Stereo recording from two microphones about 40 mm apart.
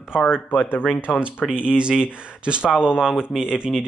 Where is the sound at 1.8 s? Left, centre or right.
Right.